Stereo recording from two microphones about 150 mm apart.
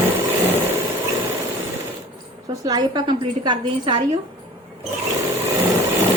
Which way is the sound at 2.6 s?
30° right (ahead or behind).